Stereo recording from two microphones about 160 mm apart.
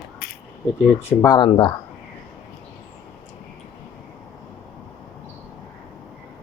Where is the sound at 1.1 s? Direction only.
20° left (ahead or behind).